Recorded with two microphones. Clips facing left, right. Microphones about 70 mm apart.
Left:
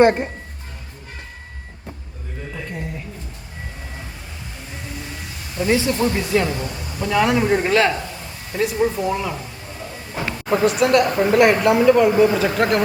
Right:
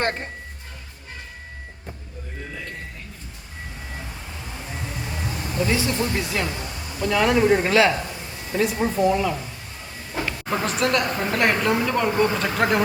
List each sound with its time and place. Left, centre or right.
0.0 s a woman's voice: centre
5.5 s speech: left
6.1 s speech: centre
6.5 s a sound: left
7.0 s speech: centre
10.1 s a sound: centre
10.5 s speech: centre